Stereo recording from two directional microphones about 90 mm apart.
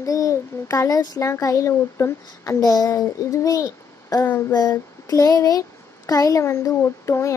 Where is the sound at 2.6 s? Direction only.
45° left (ahead or behind).